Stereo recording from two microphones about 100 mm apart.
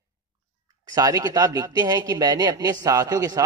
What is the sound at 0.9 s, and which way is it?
A man's voice, 40° right (ahead or behind).